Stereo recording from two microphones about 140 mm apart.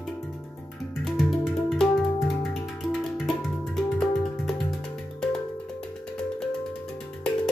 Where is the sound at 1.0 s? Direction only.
Centre (ahead or behind).